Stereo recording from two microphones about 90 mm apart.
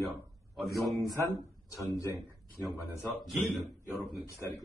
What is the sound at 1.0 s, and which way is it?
Speech, 45° right (ahead or behind).